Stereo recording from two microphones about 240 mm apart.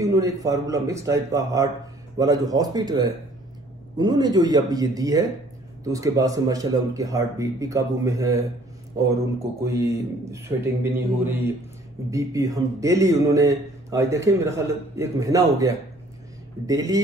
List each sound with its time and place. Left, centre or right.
0.0 s speech: centre